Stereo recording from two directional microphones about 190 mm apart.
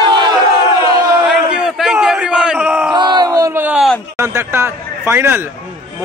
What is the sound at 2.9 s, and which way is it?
Crowd, 20° right (ahead or behind).